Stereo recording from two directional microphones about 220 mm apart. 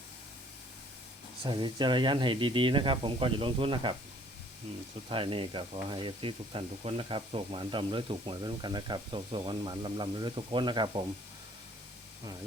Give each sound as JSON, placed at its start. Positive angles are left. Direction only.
{"t": 1.4, "sound": "speech", "side_deg": -20}
{"t": 5.0, "sound": "speech", "side_deg": -25}